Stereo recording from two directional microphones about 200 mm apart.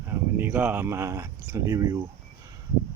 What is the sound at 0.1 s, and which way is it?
Speech, 10° right (ahead or behind).